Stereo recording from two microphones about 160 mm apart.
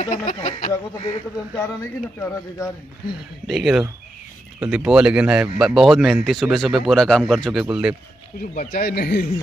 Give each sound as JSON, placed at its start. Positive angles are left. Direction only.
{"t": 0.0, "sound": "speech", "side_deg": 50}
{"t": 1.8, "sound": "speech", "side_deg": 15}
{"t": 3.4, "sound": "speech", "side_deg": 0}
{"t": 8.4, "sound": "speech", "side_deg": 65}